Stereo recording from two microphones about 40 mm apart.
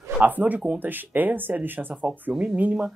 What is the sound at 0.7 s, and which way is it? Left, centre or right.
Speech, right.